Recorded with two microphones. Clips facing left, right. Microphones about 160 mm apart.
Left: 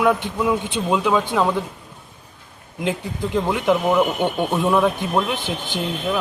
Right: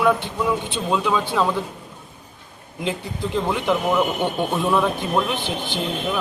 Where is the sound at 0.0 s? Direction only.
10° left (ahead or behind).